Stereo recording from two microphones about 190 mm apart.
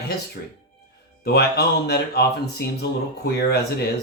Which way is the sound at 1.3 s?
60° left (ahead or behind).